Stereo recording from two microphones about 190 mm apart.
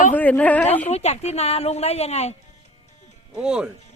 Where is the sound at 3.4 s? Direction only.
5° right (ahead or behind).